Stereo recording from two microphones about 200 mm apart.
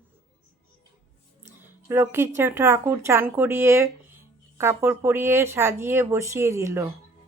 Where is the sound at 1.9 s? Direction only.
10° right (ahead or behind).